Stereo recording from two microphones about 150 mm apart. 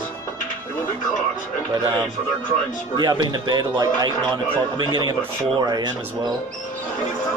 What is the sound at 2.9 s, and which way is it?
A man's voice, 30° right (ahead or behind).